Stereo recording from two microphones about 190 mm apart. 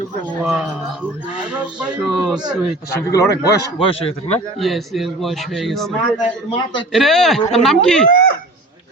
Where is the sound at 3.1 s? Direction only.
15° left (ahead or behind); by 4.4 s 30° left (ahead or behind).